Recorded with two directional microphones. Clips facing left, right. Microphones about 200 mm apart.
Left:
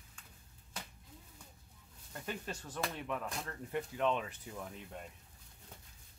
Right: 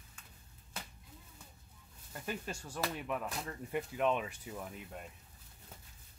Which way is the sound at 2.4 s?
10° right (ahead or behind).